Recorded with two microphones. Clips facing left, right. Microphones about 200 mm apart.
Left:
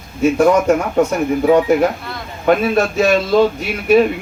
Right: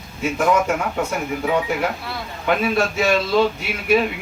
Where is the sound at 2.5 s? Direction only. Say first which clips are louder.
Left 5 dB; 45° left (ahead or behind).